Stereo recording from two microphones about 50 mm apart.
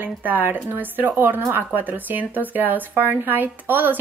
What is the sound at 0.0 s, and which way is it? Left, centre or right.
Speech, right.